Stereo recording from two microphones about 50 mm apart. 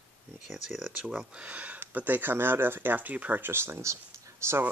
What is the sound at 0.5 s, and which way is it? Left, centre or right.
Speech, centre.